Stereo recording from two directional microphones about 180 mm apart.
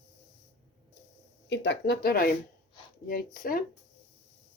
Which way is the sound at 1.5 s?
75° left (ahead or behind).